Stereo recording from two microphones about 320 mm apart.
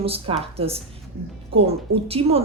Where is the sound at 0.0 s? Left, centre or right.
Centre.